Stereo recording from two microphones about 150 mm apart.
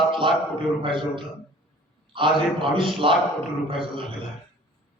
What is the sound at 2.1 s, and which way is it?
A man's voice, 35° right (ahead or behind).